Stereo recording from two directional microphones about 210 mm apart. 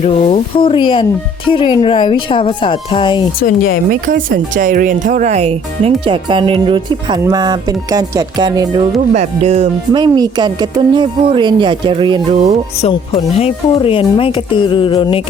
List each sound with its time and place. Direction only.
0.0 s speech: 25° left (ahead or behind)
3.4 s speech: 45° left (ahead or behind)
3.8 s speech: 40° right (ahead or behind)
10.0 s speech: 20° right (ahead or behind)
12.8 s speech: 25° left (ahead or behind)